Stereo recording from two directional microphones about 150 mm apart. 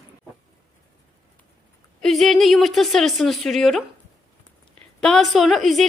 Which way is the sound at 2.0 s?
Centre (ahead or behind).